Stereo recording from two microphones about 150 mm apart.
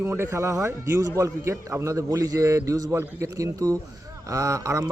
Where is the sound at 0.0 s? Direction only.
15° right (ahead or behind).